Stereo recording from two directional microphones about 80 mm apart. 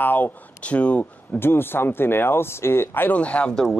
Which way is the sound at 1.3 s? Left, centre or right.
Left.